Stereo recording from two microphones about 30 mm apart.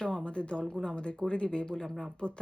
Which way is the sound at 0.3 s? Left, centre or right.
Left.